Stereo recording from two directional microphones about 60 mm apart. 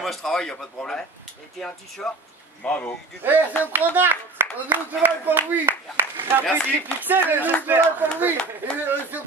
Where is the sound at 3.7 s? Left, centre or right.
Right.